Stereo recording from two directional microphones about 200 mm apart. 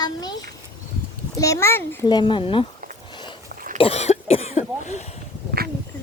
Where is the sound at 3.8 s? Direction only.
30° left (ahead or behind).